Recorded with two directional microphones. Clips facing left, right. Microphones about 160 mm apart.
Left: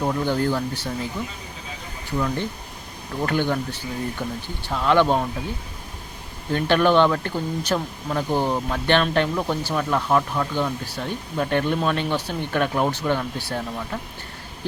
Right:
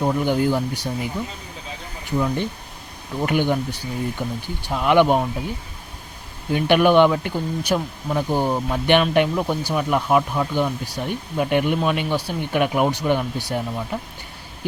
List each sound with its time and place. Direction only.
0.0 s speech: 15° right (ahead or behind)
6.5 s speech: 15° right (ahead or behind)